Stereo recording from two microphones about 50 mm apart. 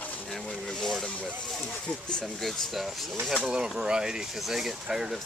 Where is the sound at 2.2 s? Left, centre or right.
Centre.